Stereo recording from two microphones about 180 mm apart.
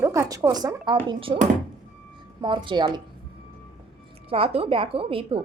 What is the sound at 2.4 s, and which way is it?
Speech, 30° right (ahead or behind).